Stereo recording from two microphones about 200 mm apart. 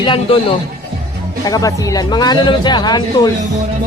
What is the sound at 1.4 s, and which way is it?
Speech, 20° left (ahead or behind).